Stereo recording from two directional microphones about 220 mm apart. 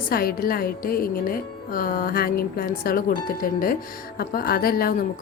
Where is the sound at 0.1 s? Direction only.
45° left (ahead or behind).